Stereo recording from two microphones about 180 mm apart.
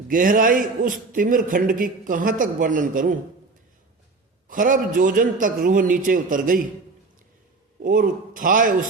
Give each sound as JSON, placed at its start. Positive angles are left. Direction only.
{"t": 0.1, "sound": "a man's voice", "side_deg": -50}
{"t": 4.4, "sound": "a man's voice", "side_deg": -50}
{"t": 7.8, "sound": "a man's voice", "side_deg": -50}